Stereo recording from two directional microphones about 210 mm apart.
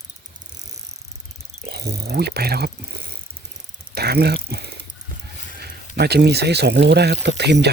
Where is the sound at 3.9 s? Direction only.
50° right (ahead or behind).